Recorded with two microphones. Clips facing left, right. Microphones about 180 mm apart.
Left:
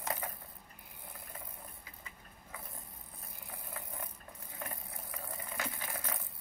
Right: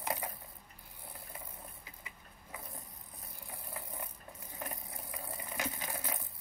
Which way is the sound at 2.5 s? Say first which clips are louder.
Right 2 dB; 20° right (ahead or behind).